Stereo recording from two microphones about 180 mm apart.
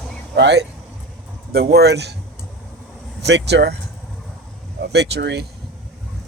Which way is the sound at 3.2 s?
70° right (ahead or behind).